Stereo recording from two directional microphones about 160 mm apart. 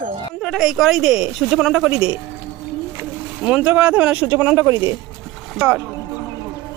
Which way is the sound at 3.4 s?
5° right (ahead or behind).